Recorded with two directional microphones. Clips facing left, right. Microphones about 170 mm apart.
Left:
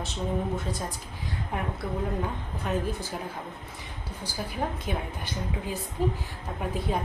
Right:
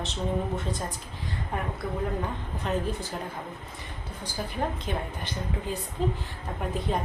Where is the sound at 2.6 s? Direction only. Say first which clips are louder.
Even; 5° left (ahead or behind).